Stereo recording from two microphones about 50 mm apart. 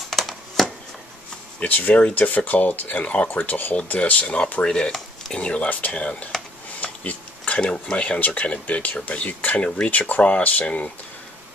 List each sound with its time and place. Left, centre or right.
0.1 s a sound: centre
1.6 s speech: left
3.3 s speech: left
3.7 s speech: left
5.7 s speech: left
6.8 s a sound: left
7.7 s speech: left
9.8 s speech: left